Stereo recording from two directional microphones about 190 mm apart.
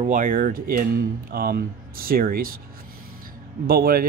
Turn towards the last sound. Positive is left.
turn(degrees=-50)  # may be behind; listen again after turning